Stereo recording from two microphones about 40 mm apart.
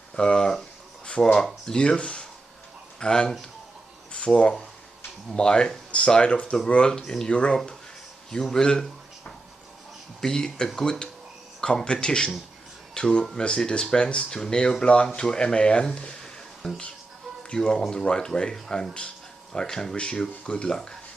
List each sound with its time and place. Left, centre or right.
0.2 s speech: centre
7.0 s speech: centre
7.3 s speech: left
16.6 s speech: centre
17.5 s speech: centre